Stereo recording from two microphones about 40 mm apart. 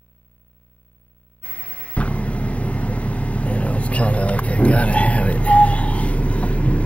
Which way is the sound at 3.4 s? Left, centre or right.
Left.